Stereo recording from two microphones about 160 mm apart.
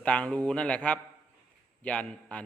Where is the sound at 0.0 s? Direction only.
5° left (ahead or behind).